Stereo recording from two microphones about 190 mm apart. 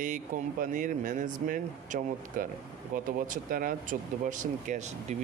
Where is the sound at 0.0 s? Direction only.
45° right (ahead or behind).